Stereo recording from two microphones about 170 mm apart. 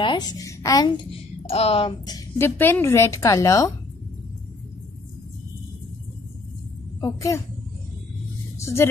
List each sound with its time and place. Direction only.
0.0 s a child's voice: 25° left (ahead or behind)
1.5 s a woman's voice: 35° left (ahead or behind); by 3.7 s 20° left (ahead or behind)
7.0 s a woman's voice: 20° left (ahead or behind)
8.5 s a sound: 15° left (ahead or behind)